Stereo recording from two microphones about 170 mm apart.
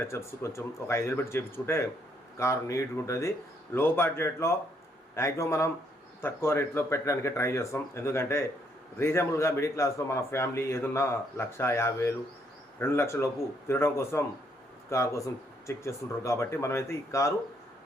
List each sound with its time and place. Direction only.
0.0 s a man's voice: 15° left (ahead or behind)